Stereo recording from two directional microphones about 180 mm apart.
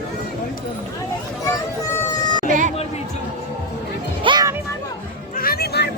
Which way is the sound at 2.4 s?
45° right (ahead or behind).